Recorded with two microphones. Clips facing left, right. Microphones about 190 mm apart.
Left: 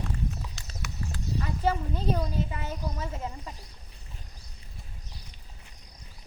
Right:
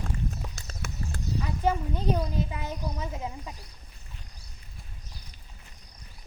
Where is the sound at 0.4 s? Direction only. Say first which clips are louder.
Right 2 dB; 50° right (ahead or behind).